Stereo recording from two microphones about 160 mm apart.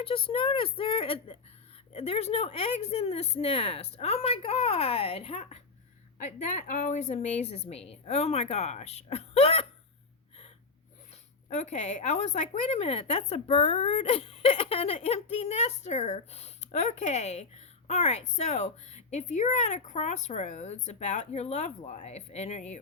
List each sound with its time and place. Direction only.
0.0 s a woman's voice: 35° left (ahead or behind)
11.4 s a woman's voice: 45° left (ahead or behind)